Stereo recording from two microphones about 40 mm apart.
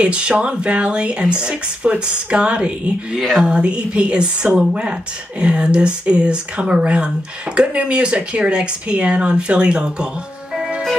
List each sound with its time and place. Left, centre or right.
0.0 s speech: right